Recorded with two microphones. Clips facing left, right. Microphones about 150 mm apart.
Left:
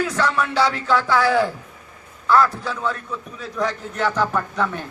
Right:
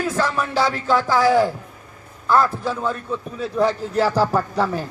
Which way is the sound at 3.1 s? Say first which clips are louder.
Right 6 dB; 30° right (ahead or behind).